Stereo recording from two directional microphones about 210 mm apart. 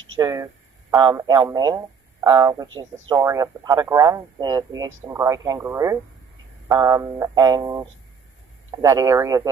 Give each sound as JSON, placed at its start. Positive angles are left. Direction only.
{"t": 0.2, "sound": "speech", "side_deg": -15}